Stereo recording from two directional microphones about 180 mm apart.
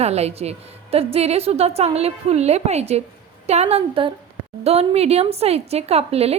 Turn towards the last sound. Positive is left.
turn(degrees=-35)  # may be behind; listen again after turning